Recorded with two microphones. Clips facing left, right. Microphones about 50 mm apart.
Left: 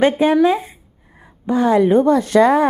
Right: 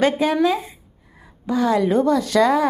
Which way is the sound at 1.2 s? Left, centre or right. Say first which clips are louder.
Left 3 dB; left.